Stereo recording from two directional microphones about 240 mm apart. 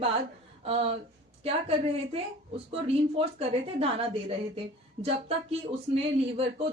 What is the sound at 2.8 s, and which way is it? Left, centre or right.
A woman's voice, right.